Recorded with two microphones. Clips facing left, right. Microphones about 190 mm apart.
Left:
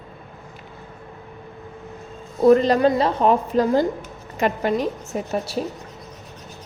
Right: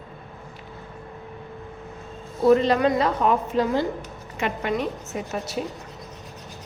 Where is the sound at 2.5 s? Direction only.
40° left (ahead or behind).